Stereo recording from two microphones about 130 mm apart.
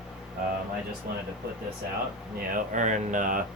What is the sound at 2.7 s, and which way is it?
Speech, 70° right (ahead or behind).